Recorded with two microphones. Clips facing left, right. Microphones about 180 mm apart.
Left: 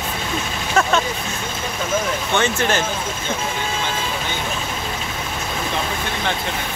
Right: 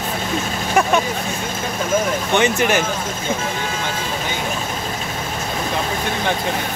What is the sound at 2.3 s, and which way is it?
Speech, 15° right (ahead or behind).